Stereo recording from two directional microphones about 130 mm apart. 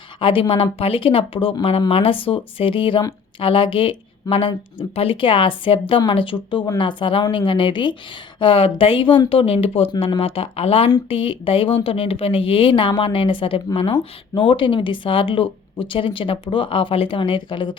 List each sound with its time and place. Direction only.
0.2 s speech: 45° left (ahead or behind)